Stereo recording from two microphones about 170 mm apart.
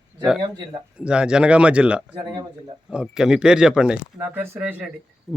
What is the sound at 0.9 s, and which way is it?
Speech, 5° right (ahead or behind).